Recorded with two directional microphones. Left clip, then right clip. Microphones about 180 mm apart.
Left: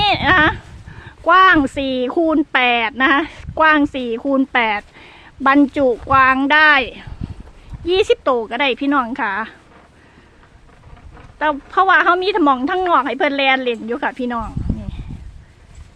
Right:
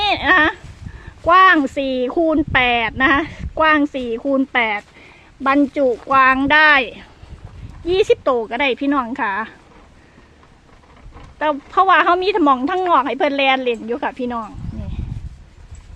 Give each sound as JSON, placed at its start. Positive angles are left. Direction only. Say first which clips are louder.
{"t": 0.0, "sound": "dog", "louder": "left 1 dB", "side_deg": 10}
{"t": 1.0, "sound": "speech", "louder": "even", "side_deg": 15}
{"t": 11.3, "sound": "speech", "louder": "even", "side_deg": 5}